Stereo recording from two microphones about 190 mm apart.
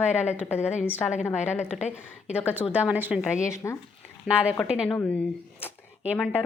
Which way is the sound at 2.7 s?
10° right (ahead or behind).